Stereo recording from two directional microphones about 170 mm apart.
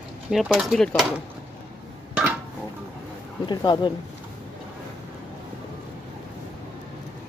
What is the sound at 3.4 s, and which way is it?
Speech, 25° left (ahead or behind).